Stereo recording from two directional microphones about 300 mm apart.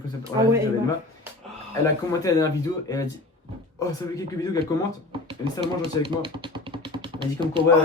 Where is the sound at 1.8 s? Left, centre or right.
Centre.